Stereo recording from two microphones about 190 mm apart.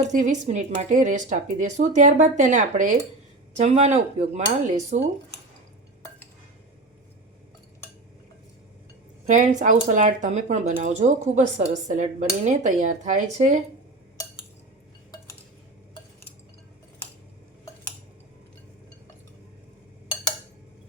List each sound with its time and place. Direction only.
0.1 s speech: 40° right (ahead or behind)
9.2 s speech: 40° right (ahead or behind)